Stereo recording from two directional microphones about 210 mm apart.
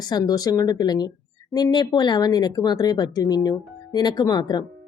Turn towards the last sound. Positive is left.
turn(degrees=20)  # may be behind; listen again after turning